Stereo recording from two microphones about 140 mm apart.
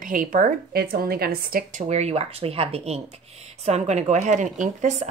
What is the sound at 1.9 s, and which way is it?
A woman's voice, 50° right (ahead or behind).